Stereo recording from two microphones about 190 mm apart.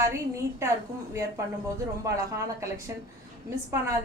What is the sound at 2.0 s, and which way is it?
A woman's voice, 15° right (ahead or behind).